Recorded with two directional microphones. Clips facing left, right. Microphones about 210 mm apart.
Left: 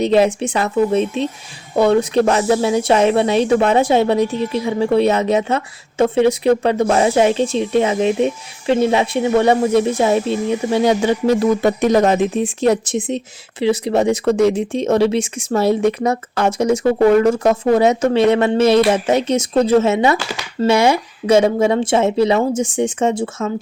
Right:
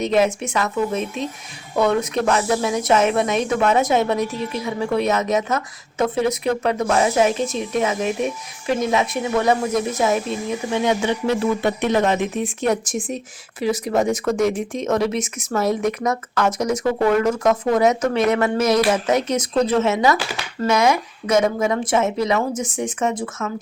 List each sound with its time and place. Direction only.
0.0 s speech: 30° left (ahead or behind)